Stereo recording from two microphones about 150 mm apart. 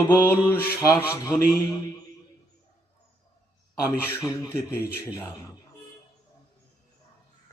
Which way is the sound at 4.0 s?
15° left (ahead or behind).